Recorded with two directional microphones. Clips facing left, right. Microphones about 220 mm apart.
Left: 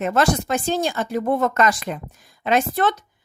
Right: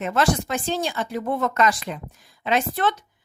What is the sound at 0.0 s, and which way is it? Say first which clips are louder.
Speech: left 2 dB; 45° left (ahead or behind).